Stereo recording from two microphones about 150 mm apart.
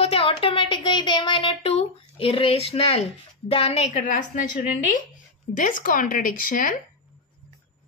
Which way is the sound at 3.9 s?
60° left (ahead or behind).